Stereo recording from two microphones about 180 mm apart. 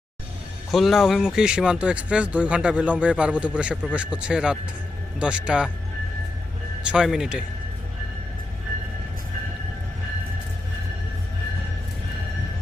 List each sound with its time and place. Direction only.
0.7 s speech: centre (ahead or behind)
6.8 s speech: 5° right (ahead or behind)